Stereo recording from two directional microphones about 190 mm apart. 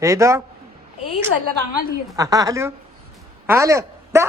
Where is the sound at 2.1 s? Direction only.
15° right (ahead or behind).